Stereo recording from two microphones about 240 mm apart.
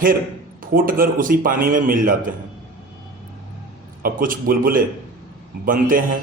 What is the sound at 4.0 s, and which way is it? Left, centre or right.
A man's voice, right.